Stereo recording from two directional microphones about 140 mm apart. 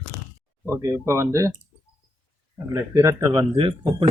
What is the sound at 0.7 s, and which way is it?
Speech, 20° right (ahead or behind).